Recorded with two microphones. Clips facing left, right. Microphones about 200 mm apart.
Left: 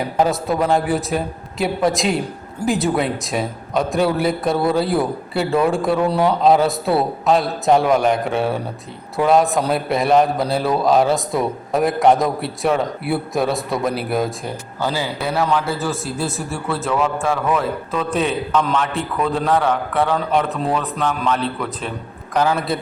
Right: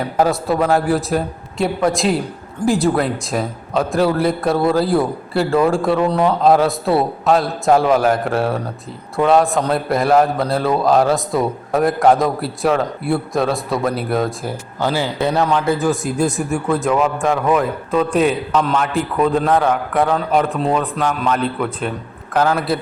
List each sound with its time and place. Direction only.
0.2 s a man's voice: centre (ahead or behind)
14.8 s a man's voice: 15° right (ahead or behind)